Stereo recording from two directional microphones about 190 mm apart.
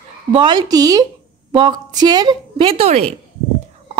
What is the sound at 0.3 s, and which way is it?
A woman's voice, 25° right (ahead or behind).